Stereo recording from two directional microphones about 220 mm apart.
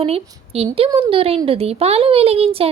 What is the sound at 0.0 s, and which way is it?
Speech, 25° right (ahead or behind).